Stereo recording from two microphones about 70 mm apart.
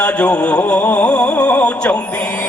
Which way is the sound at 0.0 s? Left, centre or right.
Centre.